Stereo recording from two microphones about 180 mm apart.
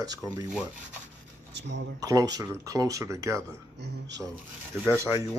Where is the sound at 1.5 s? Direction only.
80° right.